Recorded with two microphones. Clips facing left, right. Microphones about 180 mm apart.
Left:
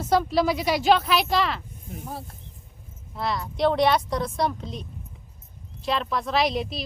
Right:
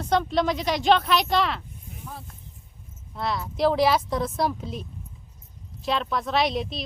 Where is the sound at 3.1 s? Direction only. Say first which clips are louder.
Even; centre (ahead or behind).